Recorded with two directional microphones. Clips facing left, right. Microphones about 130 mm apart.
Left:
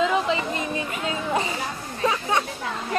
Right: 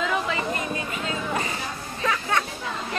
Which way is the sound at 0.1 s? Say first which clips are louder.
Left 3 dB; 25° left (ahead or behind).